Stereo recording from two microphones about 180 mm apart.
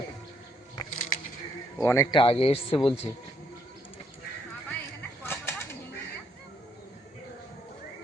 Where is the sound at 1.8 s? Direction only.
15° left (ahead or behind).